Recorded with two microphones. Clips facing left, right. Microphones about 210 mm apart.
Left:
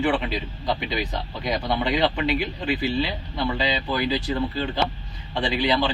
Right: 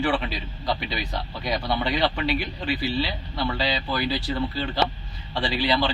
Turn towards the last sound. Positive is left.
turn(degrees=20)  # may be behind; listen again after turning